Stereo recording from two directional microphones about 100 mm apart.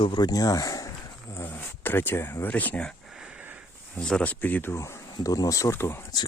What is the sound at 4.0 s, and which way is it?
Speech, 10° left (ahead or behind).